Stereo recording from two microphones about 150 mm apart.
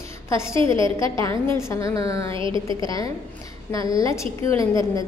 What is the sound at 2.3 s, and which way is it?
Speech, 35° right (ahead or behind).